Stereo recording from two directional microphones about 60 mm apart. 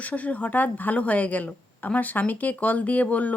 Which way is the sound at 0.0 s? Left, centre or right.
Left.